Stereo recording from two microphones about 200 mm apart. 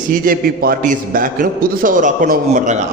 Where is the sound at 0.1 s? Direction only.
45° right (ahead or behind).